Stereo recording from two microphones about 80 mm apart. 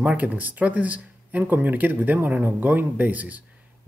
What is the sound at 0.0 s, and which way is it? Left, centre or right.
A man's voice, centre.